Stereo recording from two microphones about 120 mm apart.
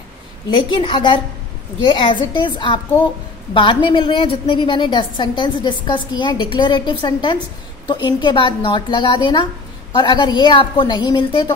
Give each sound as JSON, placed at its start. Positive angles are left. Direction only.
{"t": 0.5, "sound": "a woman's voice", "side_deg": 40}